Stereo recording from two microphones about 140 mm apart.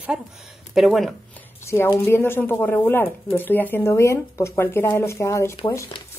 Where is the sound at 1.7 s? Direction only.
20° left (ahead or behind).